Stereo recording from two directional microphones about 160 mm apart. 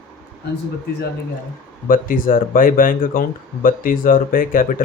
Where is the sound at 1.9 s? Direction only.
60° left (ahead or behind).